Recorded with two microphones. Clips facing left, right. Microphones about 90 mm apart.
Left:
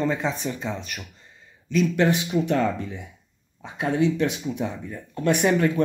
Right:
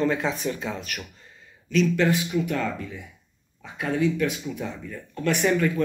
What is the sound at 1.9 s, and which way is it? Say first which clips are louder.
Speech: left 1 dB; 25° left (ahead or behind).